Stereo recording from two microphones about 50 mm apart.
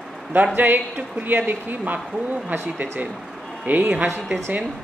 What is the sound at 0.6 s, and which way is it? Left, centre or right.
A woman's voice, right.